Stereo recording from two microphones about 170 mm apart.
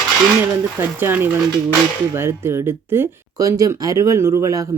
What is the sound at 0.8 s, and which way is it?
A woman's voice, 10° right (ahead or behind).